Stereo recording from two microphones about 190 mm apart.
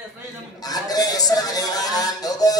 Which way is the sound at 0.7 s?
20° left (ahead or behind).